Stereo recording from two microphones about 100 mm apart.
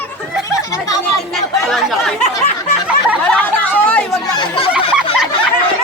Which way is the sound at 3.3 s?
15° left (ahead or behind).